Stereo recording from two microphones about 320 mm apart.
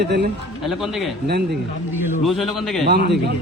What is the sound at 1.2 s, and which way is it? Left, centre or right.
Speech, right.